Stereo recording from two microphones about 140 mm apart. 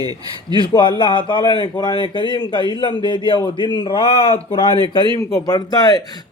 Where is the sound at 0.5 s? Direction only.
35° left (ahead or behind).